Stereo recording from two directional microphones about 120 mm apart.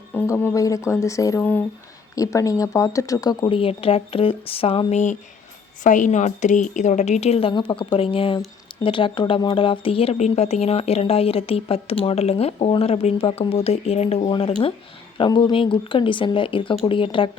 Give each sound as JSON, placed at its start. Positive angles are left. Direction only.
{"t": 0.3, "sound": "speech", "side_deg": 15}
{"t": 0.5, "sound": "speech", "side_deg": 25}
{"t": 1.4, "sound": "speech", "side_deg": 15}
{"t": 2.1, "sound": "speech", "side_deg": 30}
{"t": 3.6, "sound": "speech", "side_deg": 50}
{"t": 5.8, "sound": "a woman's voice", "side_deg": 90}
{"t": 14.3, "sound": "speech", "side_deg": 45}